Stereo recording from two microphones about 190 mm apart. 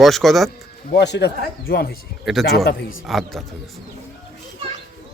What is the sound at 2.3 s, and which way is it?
Speech, centre (ahead or behind).